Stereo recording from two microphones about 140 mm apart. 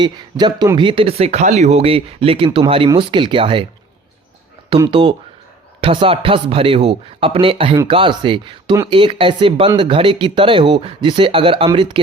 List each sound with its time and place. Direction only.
0.0 s speech: 30° right (ahead or behind)
4.9 s speech: 40° right (ahead or behind)